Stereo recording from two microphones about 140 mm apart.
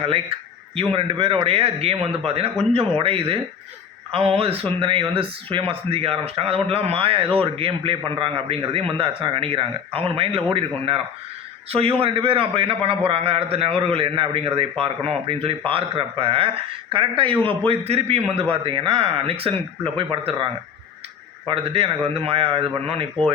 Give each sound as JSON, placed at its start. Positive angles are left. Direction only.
{"t": 0.8, "sound": "a man's voice", "side_deg": -40}